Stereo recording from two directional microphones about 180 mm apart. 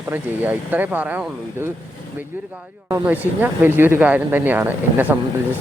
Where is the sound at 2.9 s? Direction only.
10° right (ahead or behind).